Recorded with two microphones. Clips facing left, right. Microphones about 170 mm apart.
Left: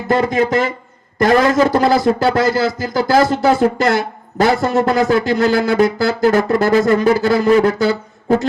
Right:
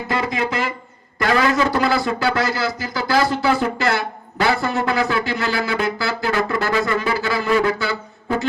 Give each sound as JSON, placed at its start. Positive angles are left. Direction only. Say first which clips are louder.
{"t": 0.1, "sound": "a man's voice", "louder": "left 8 dB", "side_deg": 45}